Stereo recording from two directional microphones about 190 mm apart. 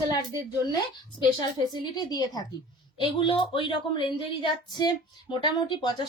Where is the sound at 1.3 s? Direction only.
20° left (ahead or behind).